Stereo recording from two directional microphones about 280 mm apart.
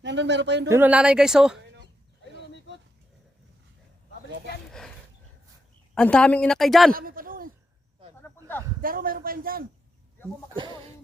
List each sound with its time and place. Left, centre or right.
0.0 s a man's voice: right
0.7 s a woman's voice: centre
5.9 s a woman's voice: centre
6.9 s a sound: right
8.2 s a sound: centre
8.8 s a man's voice: right
10.5 s speech: centre